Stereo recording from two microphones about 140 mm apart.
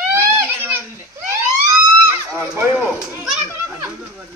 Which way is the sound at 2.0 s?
15° right (ahead or behind).